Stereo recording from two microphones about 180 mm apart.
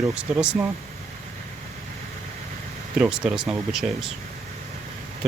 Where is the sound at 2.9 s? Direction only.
5° right (ahead or behind).